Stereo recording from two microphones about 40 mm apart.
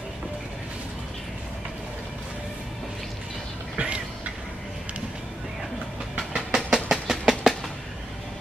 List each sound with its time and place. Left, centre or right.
3.7 s vehicle: right
6.3 s train: centre